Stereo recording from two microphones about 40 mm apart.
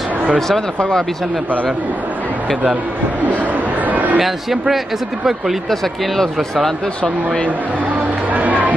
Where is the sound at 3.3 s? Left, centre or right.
Right.